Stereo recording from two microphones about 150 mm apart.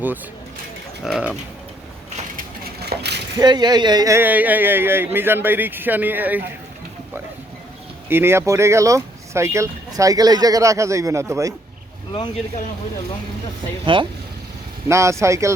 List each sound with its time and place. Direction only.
1.0 s speech: 5° right (ahead or behind)
2.8 s a sound: 90° right
3.3 s speech: 30° right (ahead or behind); by 6.4 s 10° right (ahead or behind)
8.1 s speech: 15° right (ahead or behind)
13.8 s speech: 35° right (ahead or behind)
14.8 s speech: 20° right (ahead or behind)